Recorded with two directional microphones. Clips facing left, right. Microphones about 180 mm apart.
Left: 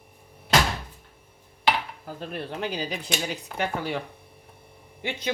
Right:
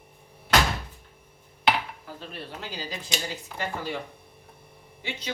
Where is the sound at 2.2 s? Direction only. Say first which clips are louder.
Left 9 dB; 55° left (ahead or behind).